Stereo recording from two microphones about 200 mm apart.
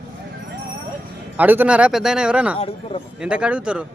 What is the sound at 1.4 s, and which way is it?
Speech, 10° right (ahead or behind).